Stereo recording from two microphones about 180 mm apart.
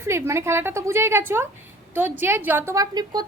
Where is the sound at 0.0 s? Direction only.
15° right (ahead or behind).